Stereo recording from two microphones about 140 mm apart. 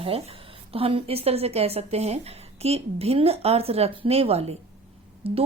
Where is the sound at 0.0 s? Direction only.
45° right (ahead or behind).